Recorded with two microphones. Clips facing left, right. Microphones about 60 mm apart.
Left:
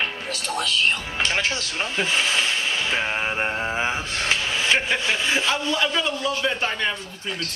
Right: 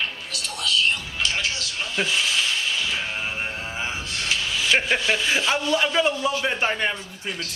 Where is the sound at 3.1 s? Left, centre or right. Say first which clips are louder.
Left 5 dB; left.